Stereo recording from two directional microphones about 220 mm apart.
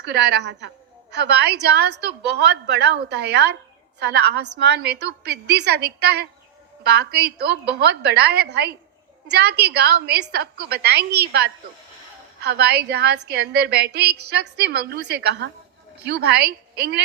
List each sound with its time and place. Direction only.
0.0 s a woman's voice: 50° right (ahead or behind)